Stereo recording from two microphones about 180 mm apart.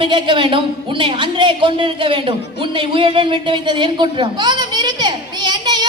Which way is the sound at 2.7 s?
30° right (ahead or behind).